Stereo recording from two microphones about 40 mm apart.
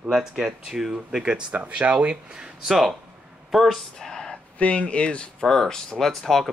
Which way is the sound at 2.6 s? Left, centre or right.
Centre.